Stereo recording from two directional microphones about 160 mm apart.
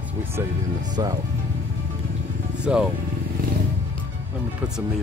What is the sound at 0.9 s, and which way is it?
Speech, 25° right (ahead or behind).